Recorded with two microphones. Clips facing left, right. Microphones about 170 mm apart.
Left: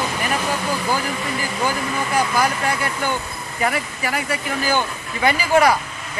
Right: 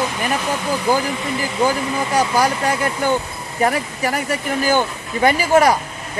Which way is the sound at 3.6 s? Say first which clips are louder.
Right 4 dB; 40° right (ahead or behind).